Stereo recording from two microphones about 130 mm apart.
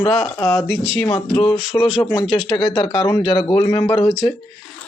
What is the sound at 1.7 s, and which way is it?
Speech, 40° left (ahead or behind).